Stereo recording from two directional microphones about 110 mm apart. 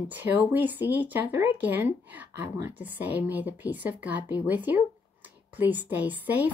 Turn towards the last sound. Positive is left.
turn(degrees=-15)  # may be behind; listen again after turning